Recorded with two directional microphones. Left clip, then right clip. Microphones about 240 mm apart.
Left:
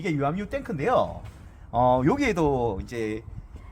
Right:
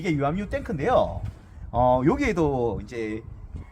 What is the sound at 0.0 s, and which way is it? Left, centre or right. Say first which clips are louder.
Speech: right 1 dB; centre.